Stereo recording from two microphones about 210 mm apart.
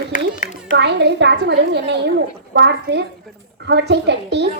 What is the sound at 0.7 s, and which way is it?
A woman's voice, 55° right (ahead or behind).